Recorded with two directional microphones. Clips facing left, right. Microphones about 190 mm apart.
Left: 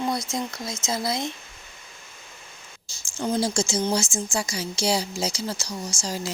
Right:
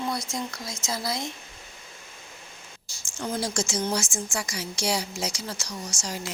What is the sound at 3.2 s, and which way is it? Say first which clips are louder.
A woman's voice: left 5 dB; 30° left (ahead or behind).